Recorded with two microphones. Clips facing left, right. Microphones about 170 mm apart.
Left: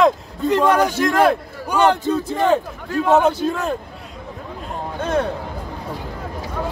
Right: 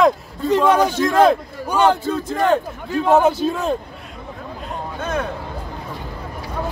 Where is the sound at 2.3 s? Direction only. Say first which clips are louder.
Right 1 dB; centre (ahead or behind).